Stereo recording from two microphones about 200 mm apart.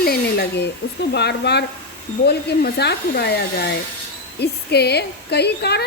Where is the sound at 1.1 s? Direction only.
55° left (ahead or behind).